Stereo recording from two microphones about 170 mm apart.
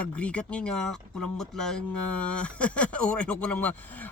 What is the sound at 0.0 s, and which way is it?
Speech, 5° left (ahead or behind).